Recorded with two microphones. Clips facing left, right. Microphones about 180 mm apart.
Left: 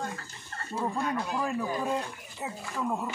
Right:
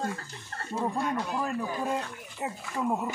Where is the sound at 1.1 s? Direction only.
Centre (ahead or behind).